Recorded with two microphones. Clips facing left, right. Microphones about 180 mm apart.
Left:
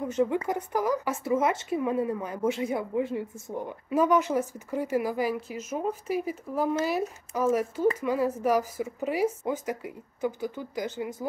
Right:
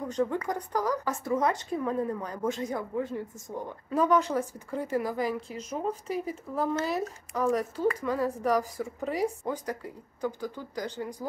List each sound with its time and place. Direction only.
0.1 s a woman's voice: 10° left (ahead or behind)
9.8 s a woman's voice: 15° left (ahead or behind)
11.0 s a woman's voice: 5° left (ahead or behind)